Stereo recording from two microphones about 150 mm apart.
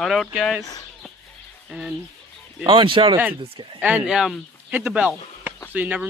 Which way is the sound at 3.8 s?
5° right (ahead or behind).